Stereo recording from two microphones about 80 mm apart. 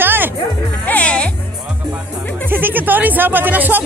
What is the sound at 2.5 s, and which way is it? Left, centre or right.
A woman's voice, right.